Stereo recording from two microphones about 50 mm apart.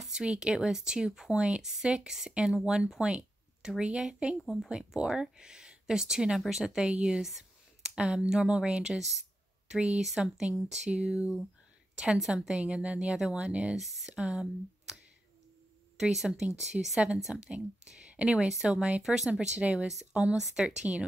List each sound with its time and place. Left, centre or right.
0.1 s speech: centre
10.9 s a woman's voice: right
12.0 s a woman's voice: centre
13.7 s speech: centre
14.1 s speech: centre
16.0 s speech: centre
17.5 s speech: centre
18.5 s a woman's voice: centre